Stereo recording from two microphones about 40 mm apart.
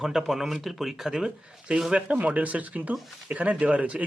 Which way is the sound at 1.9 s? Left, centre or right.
Right.